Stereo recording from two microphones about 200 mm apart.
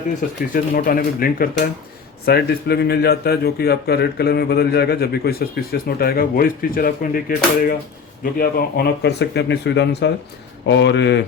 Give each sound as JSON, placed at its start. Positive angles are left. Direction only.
{"t": 0.2, "sound": "speech", "side_deg": 40}